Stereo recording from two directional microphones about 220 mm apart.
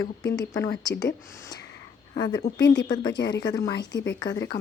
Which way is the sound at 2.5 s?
55° left (ahead or behind).